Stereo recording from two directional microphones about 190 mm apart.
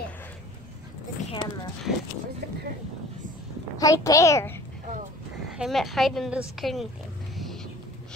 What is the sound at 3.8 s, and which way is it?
Speech, 20° left (ahead or behind).